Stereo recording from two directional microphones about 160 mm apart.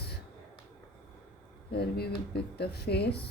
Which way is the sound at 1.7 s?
80° left.